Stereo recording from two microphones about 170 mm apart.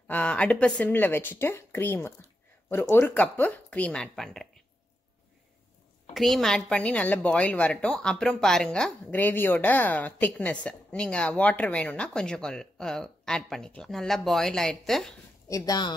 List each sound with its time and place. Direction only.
0.1 s speech: 5° left (ahead or behind)
6.1 s a woman's voice: centre (ahead or behind)
15.4 s speech: 20° left (ahead or behind)